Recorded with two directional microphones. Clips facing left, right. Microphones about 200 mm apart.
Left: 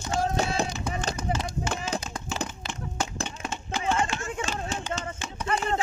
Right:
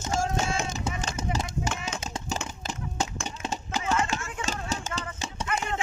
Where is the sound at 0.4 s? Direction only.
35° left (ahead or behind).